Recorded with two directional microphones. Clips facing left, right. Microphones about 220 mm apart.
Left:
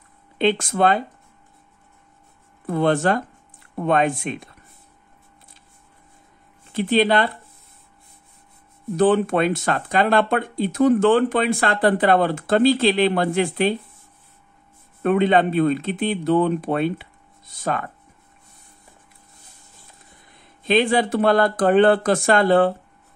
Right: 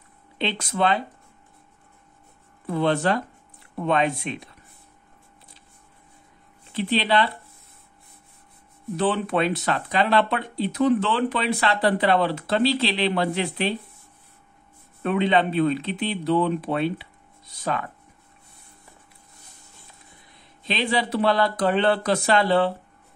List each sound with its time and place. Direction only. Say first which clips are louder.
0.4 s speech: left 6 dB; 50° left (ahead or behind)
2.6 s speech: left 3 dB; 45° left (ahead or behind)
6.7 s speech: left 5 dB; 45° left (ahead or behind)
8.9 s speech: left 6 dB; 45° left (ahead or behind)
15.0 s speech: left 4 dB; 50° left (ahead or behind)
20.6 s speech: left 7 dB; 50° left (ahead or behind)